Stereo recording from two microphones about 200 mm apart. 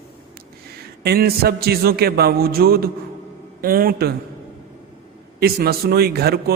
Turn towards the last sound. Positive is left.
turn(degrees=-50)  # may be behind; listen again after turning